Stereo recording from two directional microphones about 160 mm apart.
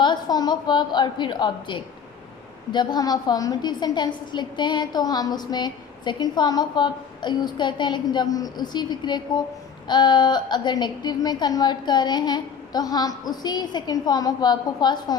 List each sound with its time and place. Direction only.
0.0 s a woman's voice: 25° left (ahead or behind)